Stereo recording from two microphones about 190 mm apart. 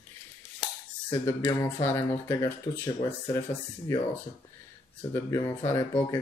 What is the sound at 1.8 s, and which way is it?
Speech, 10° left (ahead or behind).